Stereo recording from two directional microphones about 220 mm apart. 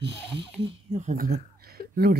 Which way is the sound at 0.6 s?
30° right (ahead or behind).